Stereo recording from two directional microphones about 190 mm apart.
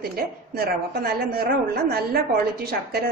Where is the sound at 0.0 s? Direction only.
50° right (ahead or behind).